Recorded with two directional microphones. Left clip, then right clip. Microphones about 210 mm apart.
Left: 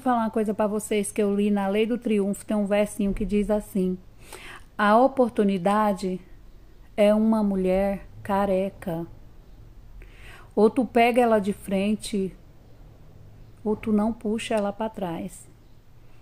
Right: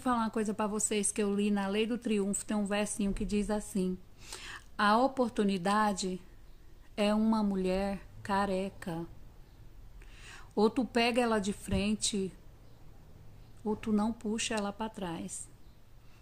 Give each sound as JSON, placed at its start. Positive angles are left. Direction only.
{"t": 0.0, "sound": "a woman's voice", "side_deg": -25}
{"t": 7.0, "sound": "a woman's voice", "side_deg": -25}
{"t": 10.1, "sound": "speech", "side_deg": -25}
{"t": 13.7, "sound": "a woman's voice", "side_deg": -25}